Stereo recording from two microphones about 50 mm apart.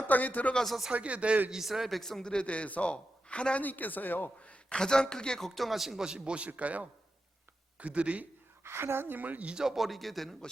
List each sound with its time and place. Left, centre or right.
0.1 s speech: left
0.5 s speech: centre
0.9 s a man's voice: right
1.5 s a man's voice: centre; by 3.6 s left
3.6 s speech: left
4.4 s a sound: left
4.8 s a man's voice: centre
5.5 s speech: centre
6.1 s a man's voice: centre
8.6 s a woman's voice: right
9.4 s a man's voice: right
9.6 s speech: centre